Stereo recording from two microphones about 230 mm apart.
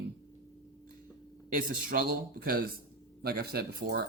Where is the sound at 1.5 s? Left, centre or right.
Right.